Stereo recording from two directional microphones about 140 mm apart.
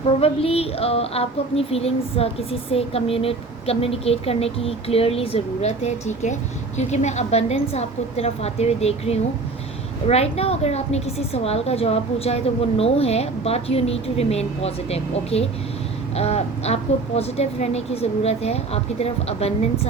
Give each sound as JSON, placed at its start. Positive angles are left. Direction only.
{"t": 0.2, "sound": "speech", "side_deg": 45}